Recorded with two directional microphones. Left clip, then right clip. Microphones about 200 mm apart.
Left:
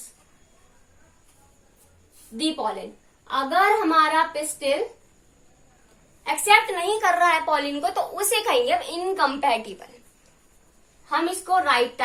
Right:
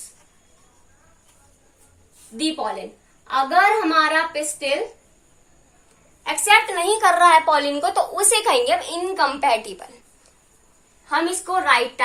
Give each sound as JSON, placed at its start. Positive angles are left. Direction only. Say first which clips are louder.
{"t": 2.3, "sound": "a woman's voice", "louder": "right 2 dB", "side_deg": -5}
{"t": 6.2, "sound": "a woman's voice", "louder": "right 2 dB", "side_deg": -10}
{"t": 11.1, "sound": "a woman's voice", "louder": "right 1 dB", "side_deg": 0}